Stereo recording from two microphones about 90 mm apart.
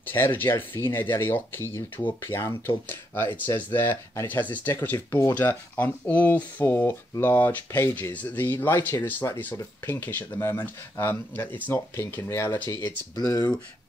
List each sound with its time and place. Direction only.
0.0 s speech: 25° left (ahead or behind)
7.9 s speech: 15° left (ahead or behind)
13.1 s speech: 45° left (ahead or behind)